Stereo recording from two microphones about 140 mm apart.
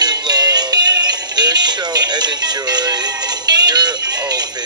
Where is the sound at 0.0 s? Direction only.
30° right (ahead or behind).